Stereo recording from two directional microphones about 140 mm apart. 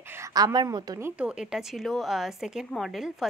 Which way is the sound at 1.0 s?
10° right (ahead or behind).